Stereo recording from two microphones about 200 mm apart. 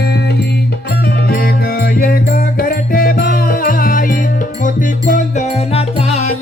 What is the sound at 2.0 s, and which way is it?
Music, 45° left (ahead or behind).